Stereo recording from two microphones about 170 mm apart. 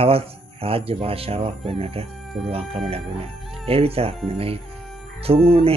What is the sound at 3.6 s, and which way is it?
Speech, 35° right (ahead or behind).